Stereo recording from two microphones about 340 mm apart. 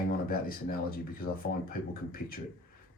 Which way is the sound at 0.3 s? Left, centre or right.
Left.